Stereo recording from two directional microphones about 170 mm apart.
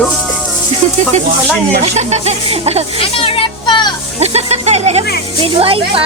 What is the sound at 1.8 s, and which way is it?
A woman's voice, 40° right (ahead or behind).